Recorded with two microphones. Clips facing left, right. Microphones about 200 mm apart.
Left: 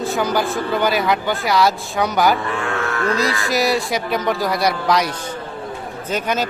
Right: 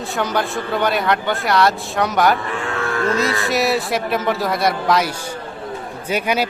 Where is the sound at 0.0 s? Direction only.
Centre (ahead or behind).